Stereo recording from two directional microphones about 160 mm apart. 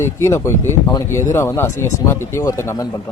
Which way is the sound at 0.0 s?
15° left (ahead or behind).